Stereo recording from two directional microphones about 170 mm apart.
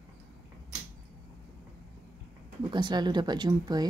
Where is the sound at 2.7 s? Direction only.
25° right (ahead or behind).